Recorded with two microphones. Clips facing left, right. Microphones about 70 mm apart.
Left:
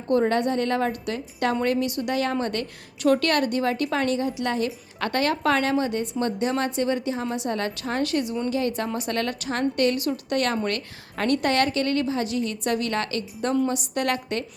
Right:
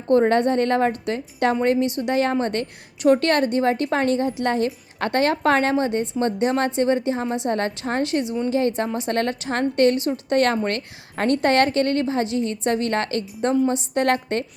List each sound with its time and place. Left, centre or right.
0.1 s a woman's voice: right